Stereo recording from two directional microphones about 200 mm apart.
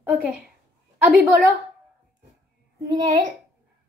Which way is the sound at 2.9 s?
25° right (ahead or behind).